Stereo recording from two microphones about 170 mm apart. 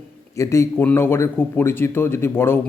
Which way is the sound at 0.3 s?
20° left (ahead or behind).